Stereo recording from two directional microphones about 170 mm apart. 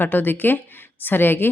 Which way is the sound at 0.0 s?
10° left (ahead or behind).